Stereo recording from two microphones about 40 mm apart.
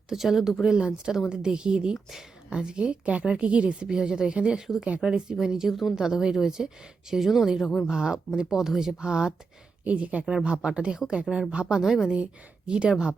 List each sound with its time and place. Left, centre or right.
0.1 s speech: centre
0.7 s speech: right
2.0 s speech: centre
2.6 s speech: right; by 6.0 s centre
6.0 s speech: centre
7.9 s speech: centre
9.0 s speech: right
9.8 s speech: right; by 12.1 s centre
12.1 s speech: right